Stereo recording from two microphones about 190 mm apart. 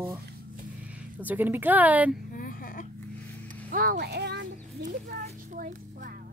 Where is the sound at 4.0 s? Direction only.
65° right (ahead or behind).